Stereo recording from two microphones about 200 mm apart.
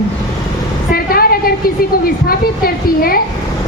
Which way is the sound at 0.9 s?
50° left (ahead or behind).